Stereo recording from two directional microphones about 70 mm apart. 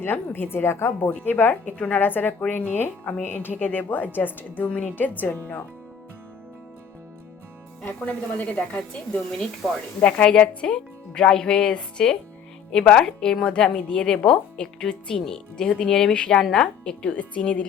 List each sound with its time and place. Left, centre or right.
0.0 s a woman's voice: left
7.9 s a woman's voice: left